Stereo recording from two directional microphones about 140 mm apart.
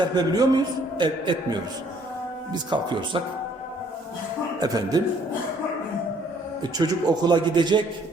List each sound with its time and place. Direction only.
0.0 s a man's voice: 30° right (ahead or behind)
4.6 s a man's voice: 30° right (ahead or behind)
6.6 s a man's voice: 30° right (ahead or behind)